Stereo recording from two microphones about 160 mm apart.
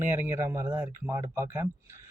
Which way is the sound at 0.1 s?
15° right (ahead or behind).